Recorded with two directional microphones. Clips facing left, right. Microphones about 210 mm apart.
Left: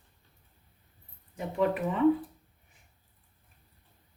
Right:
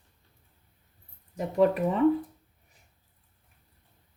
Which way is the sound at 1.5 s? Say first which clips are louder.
Right 5 dB; 40° right (ahead or behind).